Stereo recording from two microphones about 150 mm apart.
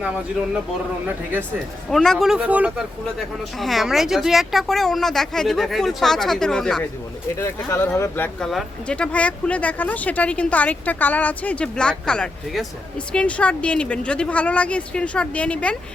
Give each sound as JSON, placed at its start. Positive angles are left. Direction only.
{"t": 1.0, "sound": "speech", "side_deg": -10}
{"t": 1.9, "sound": "speech", "side_deg": 0}
{"t": 7.3, "sound": "speech", "side_deg": 15}